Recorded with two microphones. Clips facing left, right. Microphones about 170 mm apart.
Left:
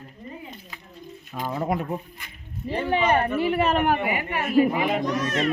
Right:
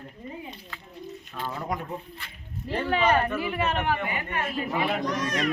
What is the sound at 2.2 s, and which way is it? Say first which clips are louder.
Speech: left 4 dB; 15° left (ahead or behind).